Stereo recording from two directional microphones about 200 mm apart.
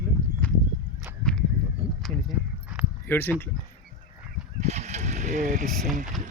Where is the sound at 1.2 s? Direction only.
5° left (ahead or behind).